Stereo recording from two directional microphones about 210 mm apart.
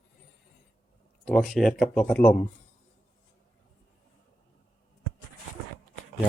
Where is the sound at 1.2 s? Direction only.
Centre (ahead or behind).